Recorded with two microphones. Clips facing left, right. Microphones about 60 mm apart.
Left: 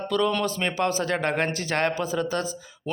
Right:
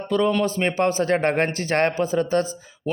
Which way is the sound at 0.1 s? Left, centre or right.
Right.